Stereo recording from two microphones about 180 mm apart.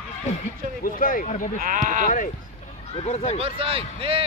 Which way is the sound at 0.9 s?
50° left (ahead or behind).